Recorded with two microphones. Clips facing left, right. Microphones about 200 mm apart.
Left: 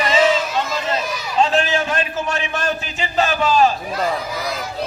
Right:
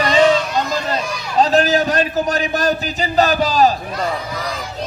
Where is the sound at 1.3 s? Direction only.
40° right (ahead or behind).